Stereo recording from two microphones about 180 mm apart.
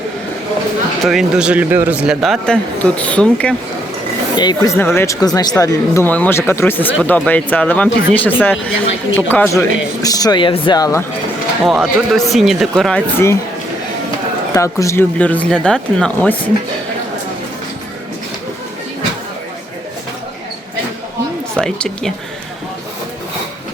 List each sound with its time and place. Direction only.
1.0 s speech: centre (ahead or behind)
4.4 s speech: 20° left (ahead or behind)
11.6 s speech: centre (ahead or behind); by 13.4 s 15° left (ahead or behind)
14.5 s speech: 15° left (ahead or behind)
21.5 s speech: 5° left (ahead or behind)